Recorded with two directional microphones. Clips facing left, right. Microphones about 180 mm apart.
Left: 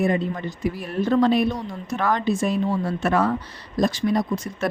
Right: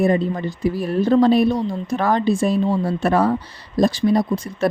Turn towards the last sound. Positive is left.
turn(degrees=-35)  # may be behind; listen again after turning